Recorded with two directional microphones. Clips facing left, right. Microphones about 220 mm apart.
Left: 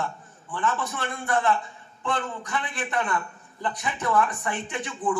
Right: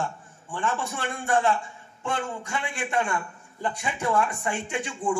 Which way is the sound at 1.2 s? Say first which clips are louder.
Right 1 dB; 30° right (ahead or behind).